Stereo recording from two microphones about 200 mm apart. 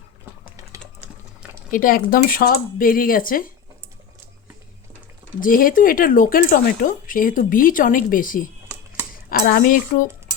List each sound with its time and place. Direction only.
1.7 s speech: 45° left (ahead or behind)
5.4 s speech: 45° left (ahead or behind)
9.5 s speech: 45° left (ahead or behind)